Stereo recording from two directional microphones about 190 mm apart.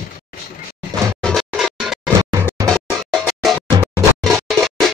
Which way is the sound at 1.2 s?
Centre (ahead or behind).